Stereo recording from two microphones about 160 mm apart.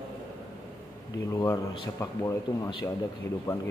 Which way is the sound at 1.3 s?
20° left (ahead or behind).